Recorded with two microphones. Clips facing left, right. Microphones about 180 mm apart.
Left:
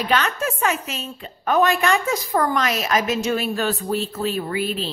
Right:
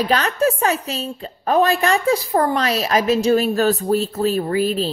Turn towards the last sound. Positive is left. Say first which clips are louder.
# right 5 dB
turn(degrees=-40)  # may be behind; listen again after turning